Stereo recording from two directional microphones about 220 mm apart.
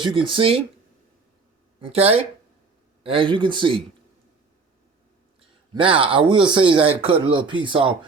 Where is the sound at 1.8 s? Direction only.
25° right (ahead or behind).